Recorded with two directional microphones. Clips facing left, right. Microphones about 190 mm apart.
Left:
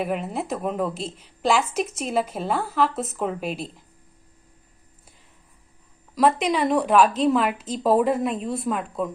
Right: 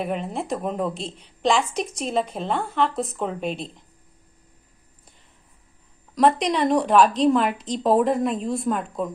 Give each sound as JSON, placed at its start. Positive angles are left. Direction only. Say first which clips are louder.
{"t": 0.0, "sound": "a woman's voice", "louder": "left 1 dB", "side_deg": 5}
{"t": 6.1, "sound": "a woman's voice", "louder": "right 1 dB", "side_deg": 5}